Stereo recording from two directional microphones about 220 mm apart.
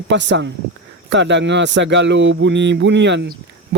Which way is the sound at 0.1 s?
55° right (ahead or behind).